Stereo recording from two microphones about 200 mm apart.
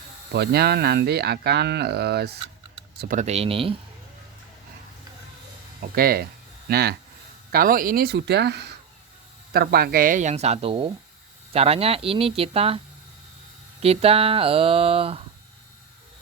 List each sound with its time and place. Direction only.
0.3 s speech: 55° right (ahead or behind)
3.0 s speech: 40° right (ahead or behind)
5.8 s speech: 50° right (ahead or behind); by 12.8 s 30° right (ahead or behind)
13.8 s speech: 30° right (ahead or behind)